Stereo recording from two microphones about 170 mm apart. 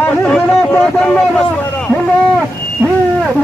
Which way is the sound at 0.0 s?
5° left (ahead or behind).